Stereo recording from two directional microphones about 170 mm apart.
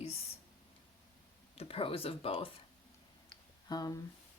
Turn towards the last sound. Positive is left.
turn(degrees=25)  # may be behind; listen again after turning